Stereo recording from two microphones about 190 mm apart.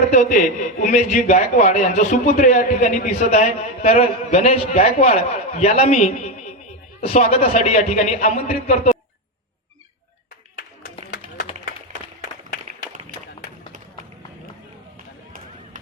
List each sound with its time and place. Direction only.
0.1 s a man's voice: 40° left (ahead or behind)